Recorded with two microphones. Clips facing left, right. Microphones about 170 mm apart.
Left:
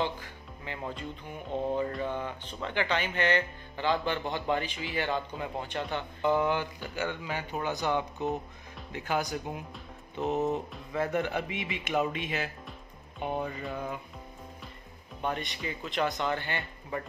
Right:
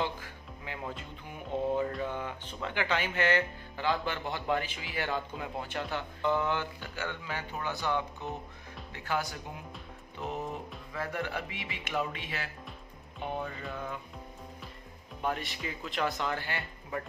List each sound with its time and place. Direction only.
0.2 s music: 5° right (ahead or behind)
1.8 s speech: 5° right (ahead or behind)
6.2 s a man's voice: 15° left (ahead or behind)
15.2 s speech: 5° right (ahead or behind)